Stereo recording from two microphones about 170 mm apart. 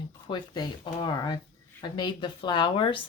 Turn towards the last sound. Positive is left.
turn(degrees=30)  # may be behind; listen again after turning